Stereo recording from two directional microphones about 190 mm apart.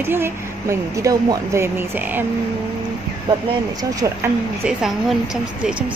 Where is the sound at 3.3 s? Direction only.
25° right (ahead or behind).